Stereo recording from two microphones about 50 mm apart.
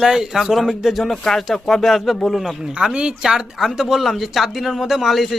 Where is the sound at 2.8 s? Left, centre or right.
Centre.